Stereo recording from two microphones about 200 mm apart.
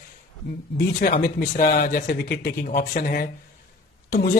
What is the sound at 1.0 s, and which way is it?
Speech, 45° left (ahead or behind).